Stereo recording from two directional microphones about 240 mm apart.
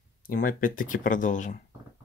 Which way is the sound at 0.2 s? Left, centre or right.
Left.